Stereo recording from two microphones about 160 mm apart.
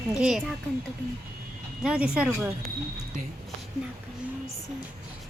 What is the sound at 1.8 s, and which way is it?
Child singing, 5° right (ahead or behind).